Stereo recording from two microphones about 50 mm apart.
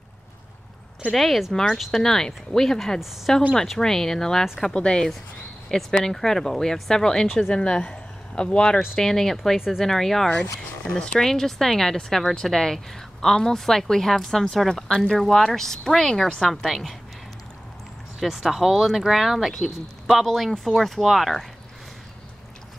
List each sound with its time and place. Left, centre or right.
1.1 s speech: centre
1.5 s speech: centre
8.9 s speech: centre
18.2 s speech: centre